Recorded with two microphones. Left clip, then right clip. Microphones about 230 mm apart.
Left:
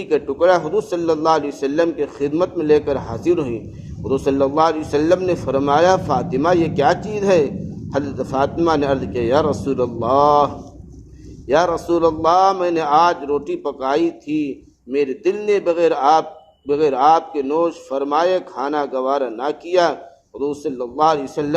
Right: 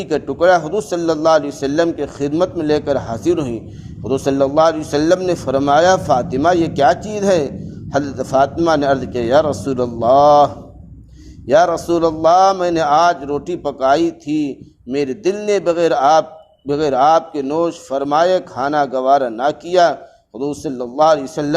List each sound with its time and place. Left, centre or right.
0.0 s a man's voice: right